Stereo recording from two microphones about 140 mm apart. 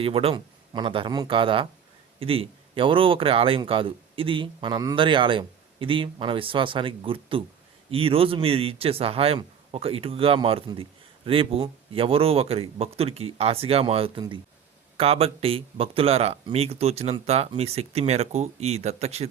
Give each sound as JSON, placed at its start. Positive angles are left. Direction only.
{"t": 0.0, "sound": "speech", "side_deg": -45}